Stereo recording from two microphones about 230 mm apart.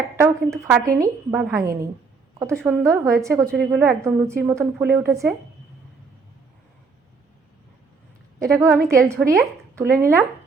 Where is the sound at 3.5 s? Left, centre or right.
Centre.